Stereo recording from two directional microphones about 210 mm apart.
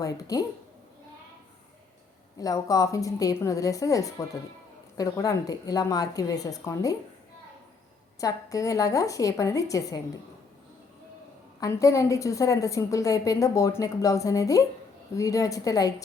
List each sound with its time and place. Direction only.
0.0 s a woman's voice: 15° left (ahead or behind)
2.4 s a woman's voice: 15° left (ahead or behind)
8.2 s a woman's voice: 15° left (ahead or behind)
11.6 s a woman's voice: 15° left (ahead or behind)